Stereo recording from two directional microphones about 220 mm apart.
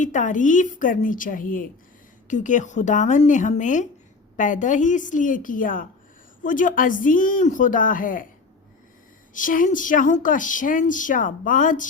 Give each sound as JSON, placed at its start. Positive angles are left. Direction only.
{"t": 0.0, "sound": "speech", "side_deg": 35}
{"t": 9.3, "sound": "speech", "side_deg": 35}